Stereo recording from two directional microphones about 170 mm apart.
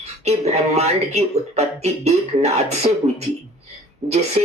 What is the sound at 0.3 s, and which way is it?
Speech, 40° right (ahead or behind).